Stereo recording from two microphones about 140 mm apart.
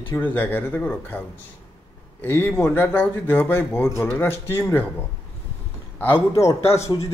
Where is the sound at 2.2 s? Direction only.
10° left (ahead or behind).